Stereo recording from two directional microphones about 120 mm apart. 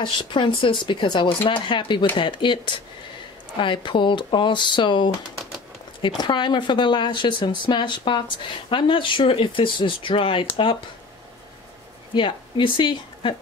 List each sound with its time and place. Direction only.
0.0 s speech: 45° left (ahead or behind)
12.1 s speech: 45° left (ahead or behind)